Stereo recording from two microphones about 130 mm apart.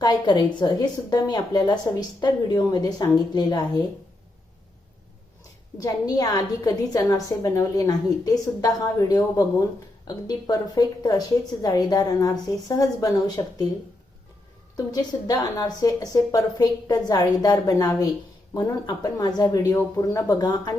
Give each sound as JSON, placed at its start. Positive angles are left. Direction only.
{"t": 0.0, "sound": "a woman's voice", "side_deg": 35}
{"t": 5.7, "sound": "a woman's voice", "side_deg": 30}
{"t": 14.8, "sound": "a woman's voice", "side_deg": 30}